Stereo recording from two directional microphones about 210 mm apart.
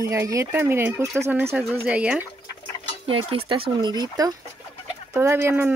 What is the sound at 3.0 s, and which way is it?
Speech, 25° right (ahead or behind).